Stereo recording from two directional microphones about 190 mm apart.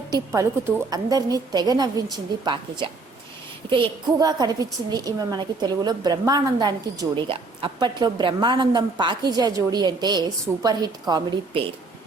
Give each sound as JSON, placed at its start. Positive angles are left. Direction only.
{"t": 0.3, "sound": "a woman's voice", "side_deg": -15}
{"t": 4.2, "sound": "a woman's voice", "side_deg": -20}